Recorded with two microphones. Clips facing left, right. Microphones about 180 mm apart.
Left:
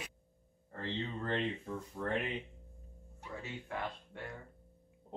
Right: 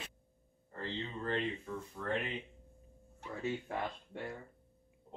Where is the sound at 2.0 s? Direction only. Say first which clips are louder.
Left 1 dB; 35° left (ahead or behind).